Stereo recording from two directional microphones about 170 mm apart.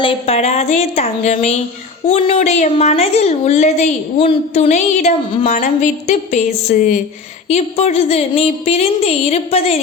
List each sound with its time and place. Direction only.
0.0 s a woman's voice: 35° left (ahead or behind)